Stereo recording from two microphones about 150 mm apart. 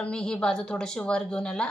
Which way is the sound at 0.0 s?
5° left (ahead or behind).